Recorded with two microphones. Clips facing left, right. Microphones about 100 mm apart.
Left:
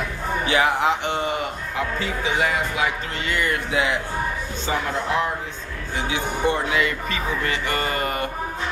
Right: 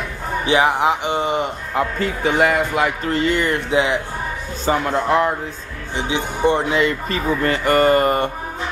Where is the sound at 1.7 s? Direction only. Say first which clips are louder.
Right 6 dB; 50° right (ahead or behind).